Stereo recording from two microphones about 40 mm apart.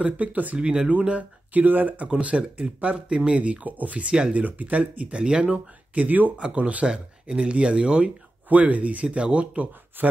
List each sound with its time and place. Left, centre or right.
0.0 s speech: right
0.6 s speech: right
0.9 s speech: right
2.0 s speech: right
5.2 s speech: right
5.5 s speech: right
6.3 s speech: right
6.9 s speech: right
8.5 s speech: right
9.0 s speech: right
10.0 s speech: right